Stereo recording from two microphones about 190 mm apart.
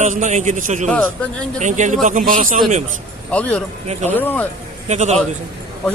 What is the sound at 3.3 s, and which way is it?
Speech, 5° left (ahead or behind).